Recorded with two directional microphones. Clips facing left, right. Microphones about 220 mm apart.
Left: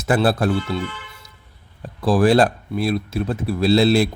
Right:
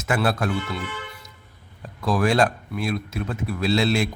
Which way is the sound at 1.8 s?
35° left (ahead or behind).